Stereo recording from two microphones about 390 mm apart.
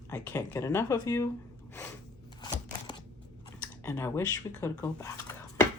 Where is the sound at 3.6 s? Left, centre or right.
Centre.